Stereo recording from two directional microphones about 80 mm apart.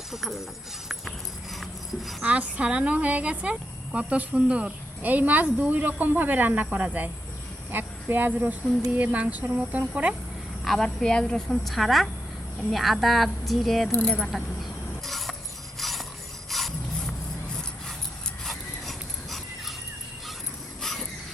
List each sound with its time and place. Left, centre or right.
0.1 s a woman's voice: centre
2.2 s a woman's voice: centre
10.6 s a woman's voice: centre
13.9 s speech: centre
14.2 s a woman's voice: centre
15.0 s a sound: centre
16.5 s rub: centre
18.4 s a sound: centre
20.8 s a sound: centre